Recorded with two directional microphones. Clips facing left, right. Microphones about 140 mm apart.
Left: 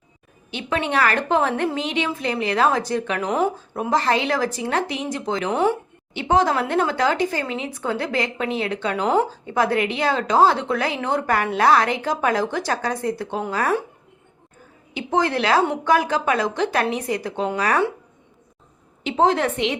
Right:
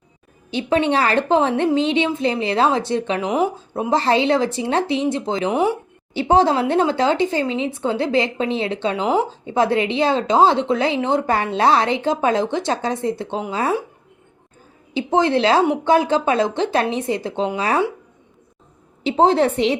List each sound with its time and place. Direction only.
0.5 s speech: 30° right (ahead or behind)
5.5 s speech: 10° right (ahead or behind)
6.1 s speech: 30° right (ahead or behind)
14.9 s speech: 25° right (ahead or behind)
19.0 s a woman's voice: 30° right (ahead or behind)